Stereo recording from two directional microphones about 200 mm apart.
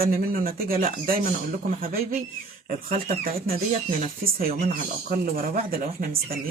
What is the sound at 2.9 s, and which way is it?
Speech, 45° right (ahead or behind).